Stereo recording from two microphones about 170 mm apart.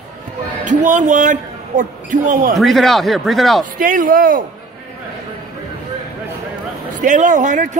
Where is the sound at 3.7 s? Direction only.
55° right (ahead or behind).